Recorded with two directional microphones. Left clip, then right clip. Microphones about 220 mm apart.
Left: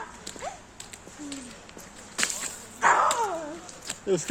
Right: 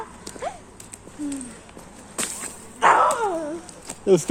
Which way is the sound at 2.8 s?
45° right (ahead or behind).